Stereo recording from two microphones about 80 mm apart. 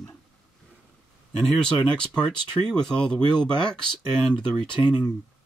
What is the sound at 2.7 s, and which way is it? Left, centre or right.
Speech, centre.